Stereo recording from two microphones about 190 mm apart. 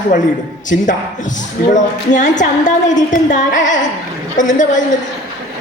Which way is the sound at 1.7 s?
40° left (ahead or behind).